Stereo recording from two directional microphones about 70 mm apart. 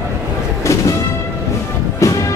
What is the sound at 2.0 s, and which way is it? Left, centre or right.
Music, left.